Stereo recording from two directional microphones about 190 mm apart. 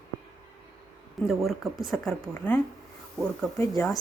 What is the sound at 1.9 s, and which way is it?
Speech, 5° left (ahead or behind).